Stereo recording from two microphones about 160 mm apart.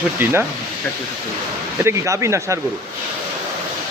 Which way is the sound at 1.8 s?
15° right (ahead or behind).